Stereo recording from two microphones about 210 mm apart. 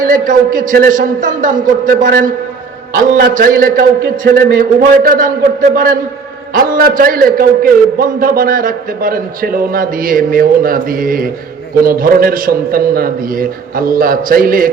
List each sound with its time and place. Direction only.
0.0 s a man's voice: 40° right (ahead or behind)